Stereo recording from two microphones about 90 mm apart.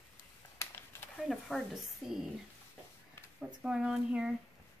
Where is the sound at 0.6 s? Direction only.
30° left (ahead or behind).